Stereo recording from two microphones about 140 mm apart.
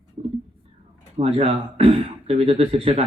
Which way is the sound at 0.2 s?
45° right (ahead or behind).